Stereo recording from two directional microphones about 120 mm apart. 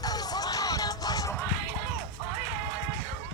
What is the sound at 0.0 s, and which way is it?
Music, 35° left (ahead or behind).